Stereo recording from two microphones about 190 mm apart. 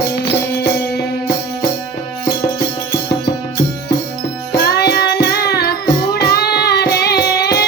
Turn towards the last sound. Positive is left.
turn(degrees=55)  # may be behind; listen again after turning